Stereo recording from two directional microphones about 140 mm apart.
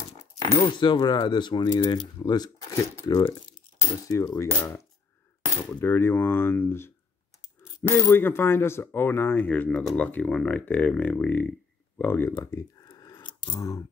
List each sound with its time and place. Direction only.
0.4 s coin: 20° left (ahead or behind)
0.7 s speech: 35° left (ahead or behind)
5.7 s speech: 15° left (ahead or behind)
7.9 s speech: 15° left (ahead or behind)
12.0 s a sound: 15° left (ahead or behind)